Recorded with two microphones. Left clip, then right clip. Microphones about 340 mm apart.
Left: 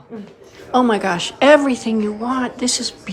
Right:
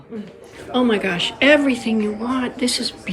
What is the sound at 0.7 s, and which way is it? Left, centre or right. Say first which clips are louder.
A woman's voice: left 3 dB; centre.